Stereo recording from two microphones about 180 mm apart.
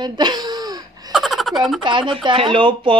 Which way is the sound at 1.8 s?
25° right (ahead or behind).